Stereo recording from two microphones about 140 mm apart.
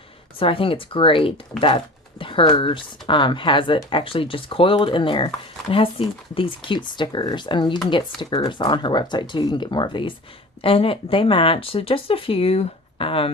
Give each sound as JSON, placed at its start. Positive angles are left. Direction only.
{"t": 0.3, "sound": "speech", "side_deg": 40}